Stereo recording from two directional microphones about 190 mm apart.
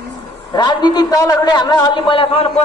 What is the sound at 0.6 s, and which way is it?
A man's voice, 20° left (ahead or behind).